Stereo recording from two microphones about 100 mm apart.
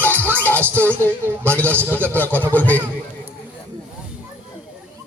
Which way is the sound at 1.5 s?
15° left (ahead or behind).